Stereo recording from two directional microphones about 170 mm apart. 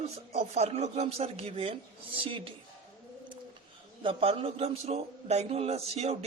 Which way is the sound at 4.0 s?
30° right (ahead or behind).